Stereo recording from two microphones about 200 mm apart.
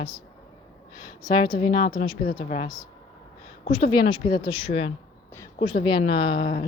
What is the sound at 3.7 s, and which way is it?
A woman's voice, 25° left (ahead or behind).